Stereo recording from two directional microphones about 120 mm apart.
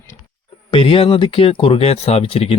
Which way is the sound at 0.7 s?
50° left (ahead or behind).